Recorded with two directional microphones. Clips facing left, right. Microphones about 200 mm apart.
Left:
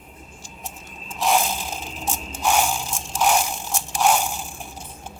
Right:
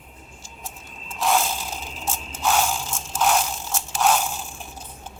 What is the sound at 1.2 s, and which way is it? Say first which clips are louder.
Mechanisms: left 1 dB; 15° left (ahead or behind).